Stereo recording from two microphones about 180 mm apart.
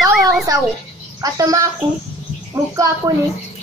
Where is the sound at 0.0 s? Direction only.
Centre (ahead or behind).